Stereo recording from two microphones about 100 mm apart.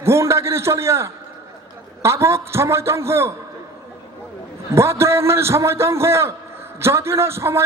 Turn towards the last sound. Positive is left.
turn(degrees=-25)  # may be behind; listen again after turning